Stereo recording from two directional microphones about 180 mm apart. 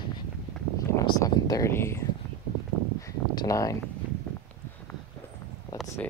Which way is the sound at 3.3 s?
20° left (ahead or behind).